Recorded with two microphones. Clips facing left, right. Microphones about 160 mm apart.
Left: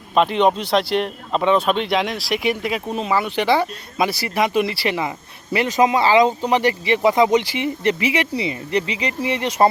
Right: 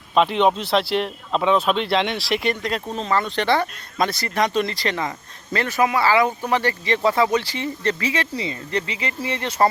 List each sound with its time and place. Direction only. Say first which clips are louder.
0.1 s speech: left 1 dB; centre (ahead or behind); by 9.6 s 15° left (ahead or behind)